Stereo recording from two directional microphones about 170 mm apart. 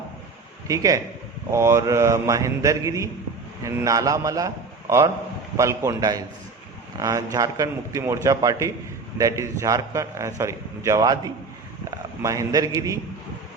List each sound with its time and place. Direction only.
0.7 s a man's voice: 20° right (ahead or behind)